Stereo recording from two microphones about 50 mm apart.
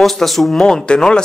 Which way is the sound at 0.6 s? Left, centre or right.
Centre.